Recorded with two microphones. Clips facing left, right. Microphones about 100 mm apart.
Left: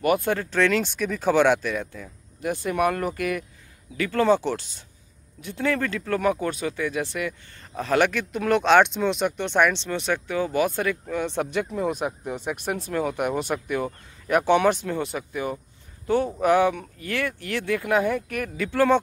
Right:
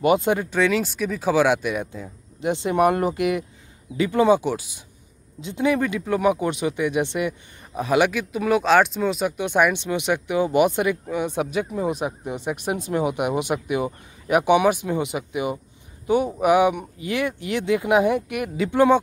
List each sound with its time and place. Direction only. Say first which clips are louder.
0.0 s speech: right 3 dB; 20° right (ahead or behind)